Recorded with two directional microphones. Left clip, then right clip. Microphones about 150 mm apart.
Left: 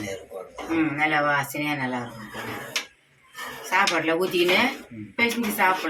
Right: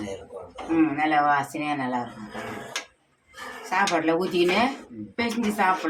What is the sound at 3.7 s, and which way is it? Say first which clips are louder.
A woman's voice: left 1 dB; 20° right (ahead or behind).